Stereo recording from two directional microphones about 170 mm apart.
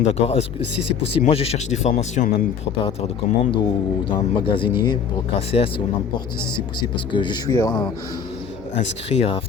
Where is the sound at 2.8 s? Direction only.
35° left (ahead or behind).